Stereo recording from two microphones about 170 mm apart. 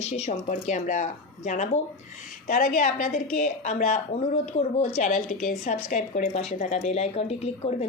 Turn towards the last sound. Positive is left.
turn(degrees=40)  # may be behind; listen again after turning